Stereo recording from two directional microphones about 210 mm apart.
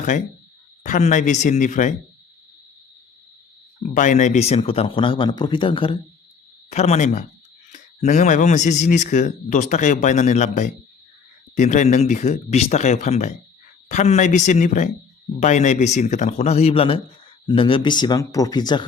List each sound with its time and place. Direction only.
0.8 s speech: 35° left (ahead or behind)
3.8 s a man's voice: 35° left (ahead or behind); by 18.9 s 20° left (ahead or behind)